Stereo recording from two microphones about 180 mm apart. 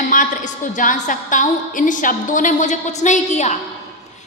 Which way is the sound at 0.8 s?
45° left (ahead or behind).